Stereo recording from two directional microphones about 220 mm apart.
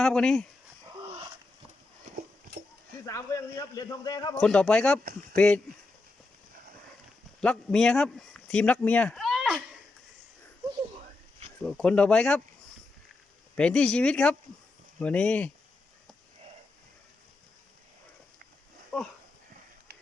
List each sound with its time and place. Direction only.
0.0 s speech: centre (ahead or behind)
3.1 s a man's voice: 15° left (ahead or behind)
4.4 s speech: 5° left (ahead or behind)
7.4 s speech: 5° left (ahead or behind)
11.6 s speech: 5° left (ahead or behind)
13.6 s speech: 5° left (ahead or behind)